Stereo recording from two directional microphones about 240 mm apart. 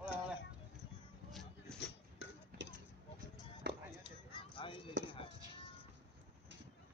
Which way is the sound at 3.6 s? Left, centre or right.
Right.